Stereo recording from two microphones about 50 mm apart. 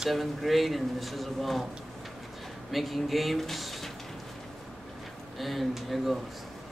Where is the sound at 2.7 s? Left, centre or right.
Centre.